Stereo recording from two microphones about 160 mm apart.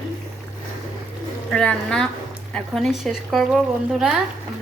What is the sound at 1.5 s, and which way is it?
Speech, 5° left (ahead or behind).